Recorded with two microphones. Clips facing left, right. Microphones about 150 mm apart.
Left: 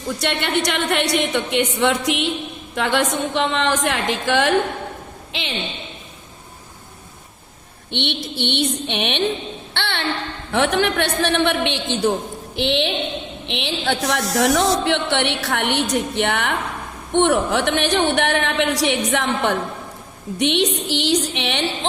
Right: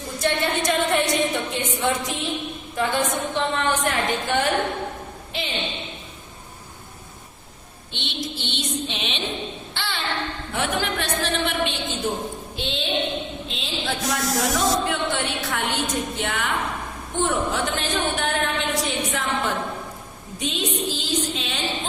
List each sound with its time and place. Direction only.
0.2 s a woman's voice: 75° left (ahead or behind); by 5.5 s 90° left
7.9 s a sound: 65° left (ahead or behind)
9.7 s child singing: 65° left (ahead or behind)
10.5 s a woman's voice: 75° left (ahead or behind)